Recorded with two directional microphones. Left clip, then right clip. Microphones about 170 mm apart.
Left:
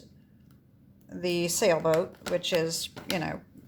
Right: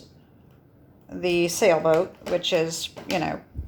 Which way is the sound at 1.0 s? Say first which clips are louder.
Right 6 dB; 35° left (ahead or behind).